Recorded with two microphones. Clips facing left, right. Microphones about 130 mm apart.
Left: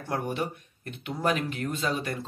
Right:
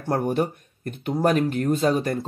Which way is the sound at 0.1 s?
45° right (ahead or behind).